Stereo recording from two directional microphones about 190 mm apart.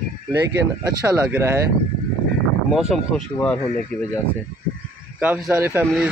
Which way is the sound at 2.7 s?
5° right (ahead or behind).